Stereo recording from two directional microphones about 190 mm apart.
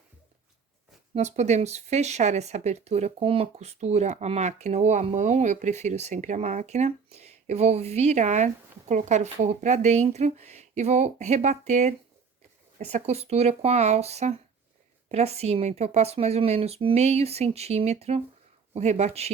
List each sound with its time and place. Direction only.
1.1 s speech: 35° right (ahead or behind)